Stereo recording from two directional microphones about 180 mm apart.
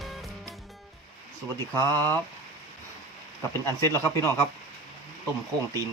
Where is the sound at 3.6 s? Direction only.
15° left (ahead or behind).